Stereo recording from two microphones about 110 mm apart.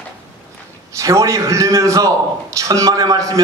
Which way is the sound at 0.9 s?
30° right (ahead or behind).